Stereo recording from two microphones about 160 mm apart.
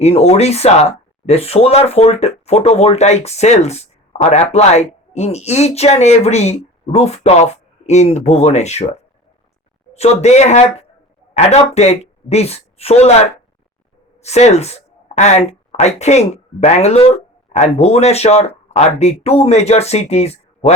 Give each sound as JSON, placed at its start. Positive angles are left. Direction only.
{"t": 0.0, "sound": "a woman's voice", "side_deg": 40}
{"t": 14.2, "sound": "speech", "side_deg": 45}